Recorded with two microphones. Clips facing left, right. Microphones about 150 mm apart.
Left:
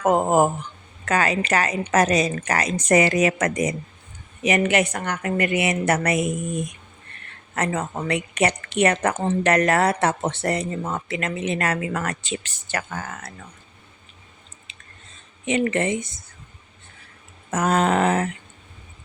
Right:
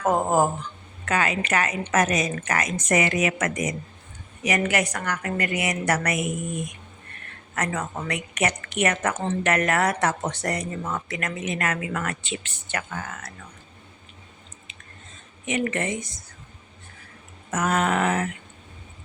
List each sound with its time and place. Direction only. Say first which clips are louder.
0.0 s a woman's voice: left 3 dB; 20° left (ahead or behind)
1.0 s a woman's voice: left 3 dB; 40° left (ahead or behind)
14.7 s chewing: right 1 dB; 30° left (ahead or behind)
15.4 s a woman's voice: left 4 dB; 30° left (ahead or behind)
17.5 s speech: left 3 dB; 30° left (ahead or behind)